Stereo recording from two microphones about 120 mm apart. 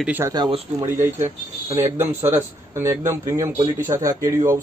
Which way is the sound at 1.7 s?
20° right (ahead or behind).